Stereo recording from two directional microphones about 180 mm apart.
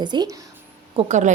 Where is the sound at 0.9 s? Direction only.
40° right (ahead or behind).